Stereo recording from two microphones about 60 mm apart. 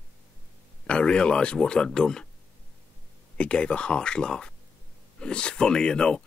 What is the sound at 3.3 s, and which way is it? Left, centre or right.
Speech, centre.